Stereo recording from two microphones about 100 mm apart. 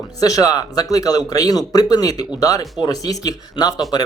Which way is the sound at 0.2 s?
35° left (ahead or behind).